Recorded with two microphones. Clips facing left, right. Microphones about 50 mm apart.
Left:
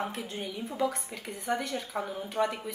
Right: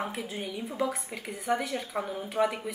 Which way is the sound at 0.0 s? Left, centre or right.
Centre.